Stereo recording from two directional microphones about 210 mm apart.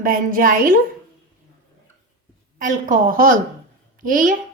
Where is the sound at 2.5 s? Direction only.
40° right (ahead or behind).